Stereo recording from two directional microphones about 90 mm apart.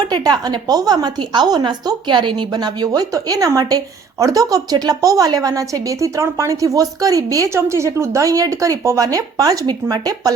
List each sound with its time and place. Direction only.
0.0 s a woman's voice: 50° right (ahead or behind)